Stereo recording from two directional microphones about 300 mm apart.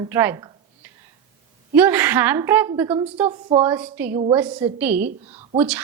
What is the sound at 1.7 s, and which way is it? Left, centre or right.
A woman's voice, centre.